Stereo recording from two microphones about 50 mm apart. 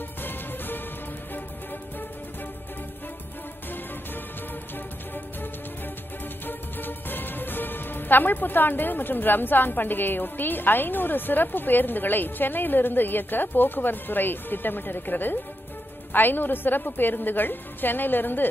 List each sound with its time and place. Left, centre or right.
0.2 s music: left
6.4 s speech: left